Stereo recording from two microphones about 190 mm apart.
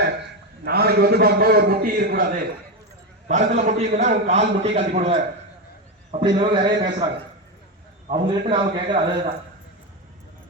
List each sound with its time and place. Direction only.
0.6 s a man's voice: 55° right (ahead or behind)
3.2 s a man's voice: 40° right (ahead or behind)
6.2 s a man's voice: 25° right (ahead or behind)
8.1 s a man's voice: 25° right (ahead or behind)